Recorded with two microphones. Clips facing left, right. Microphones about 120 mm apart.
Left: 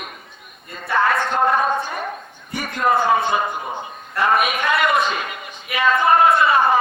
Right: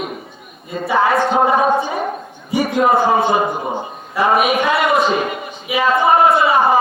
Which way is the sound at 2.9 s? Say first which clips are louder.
Even; 30° right (ahead or behind).